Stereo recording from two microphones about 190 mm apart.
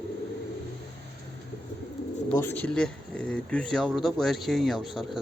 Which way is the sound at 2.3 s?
10° left (ahead or behind).